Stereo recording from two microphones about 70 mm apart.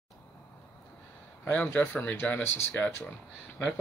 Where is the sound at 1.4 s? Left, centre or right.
Left.